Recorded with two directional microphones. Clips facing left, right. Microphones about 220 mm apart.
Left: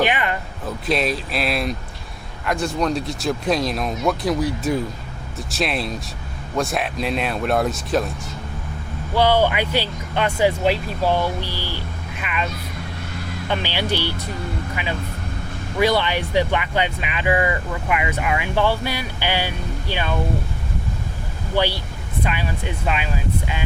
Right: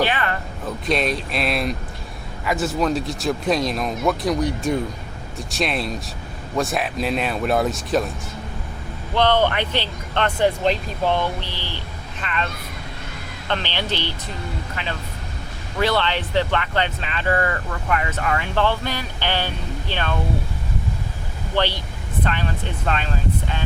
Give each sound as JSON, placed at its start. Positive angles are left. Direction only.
{"t": 0.0, "sound": "a sound", "side_deg": 15}
{"t": 0.9, "sound": "speech", "side_deg": 0}
{"t": 9.1, "sound": "speech", "side_deg": 10}
{"t": 13.5, "sound": "speech", "side_deg": 10}
{"t": 21.5, "sound": "speech", "side_deg": 10}